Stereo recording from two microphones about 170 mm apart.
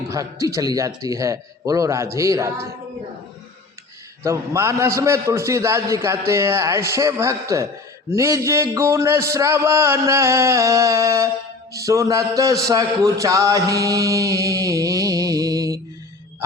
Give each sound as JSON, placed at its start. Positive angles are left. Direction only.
{"t": 0.1, "sound": "chant", "side_deg": -20}
{"t": 2.1, "sound": "a man's voice", "side_deg": -20}
{"t": 4.2, "sound": "a man's voice", "side_deg": -15}
{"t": 11.7, "sound": "chant", "side_deg": -20}